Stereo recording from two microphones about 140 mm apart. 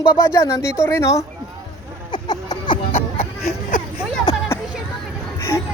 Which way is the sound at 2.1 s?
30° left (ahead or behind).